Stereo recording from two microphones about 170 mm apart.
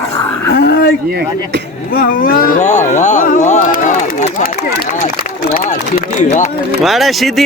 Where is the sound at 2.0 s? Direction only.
55° left (ahead or behind).